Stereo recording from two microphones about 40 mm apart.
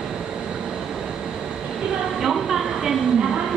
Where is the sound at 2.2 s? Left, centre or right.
Centre.